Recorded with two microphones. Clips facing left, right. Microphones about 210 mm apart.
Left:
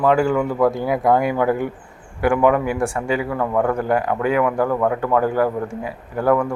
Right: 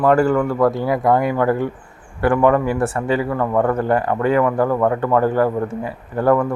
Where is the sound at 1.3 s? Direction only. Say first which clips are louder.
Right 1 dB; 15° left (ahead or behind).